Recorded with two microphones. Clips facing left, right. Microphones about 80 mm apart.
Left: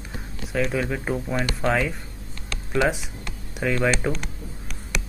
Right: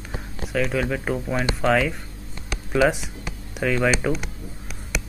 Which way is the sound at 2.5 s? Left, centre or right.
Centre.